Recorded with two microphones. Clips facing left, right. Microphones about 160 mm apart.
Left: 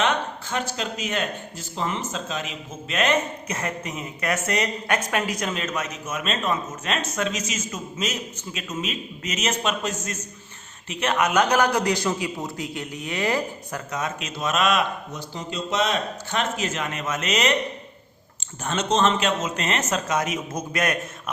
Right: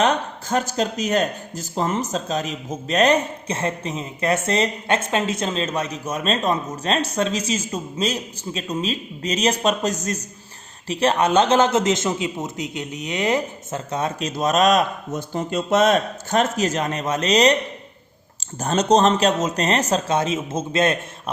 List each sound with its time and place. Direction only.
0.0 s speech: 40° right (ahead or behind)
18.6 s speech: 40° right (ahead or behind)